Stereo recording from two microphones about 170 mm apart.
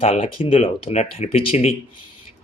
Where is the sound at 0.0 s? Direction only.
35° left (ahead or behind).